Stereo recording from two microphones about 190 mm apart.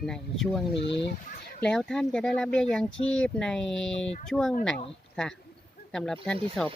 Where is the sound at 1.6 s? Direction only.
5° left (ahead or behind).